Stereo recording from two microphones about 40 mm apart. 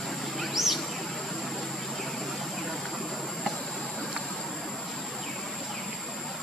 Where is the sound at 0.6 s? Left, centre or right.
Centre.